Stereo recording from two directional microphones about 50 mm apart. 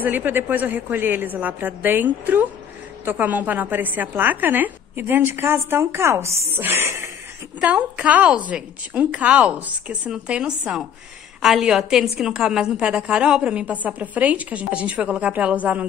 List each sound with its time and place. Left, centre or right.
0.0 s a woman's voice: right
6.6 s a sound: right
7.6 s a woman's voice: right
11.4 s a woman's voice: centre; by 15.9 s right